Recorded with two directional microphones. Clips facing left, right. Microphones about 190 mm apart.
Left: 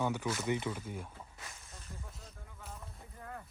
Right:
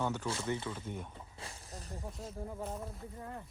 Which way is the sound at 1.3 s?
30° right (ahead or behind).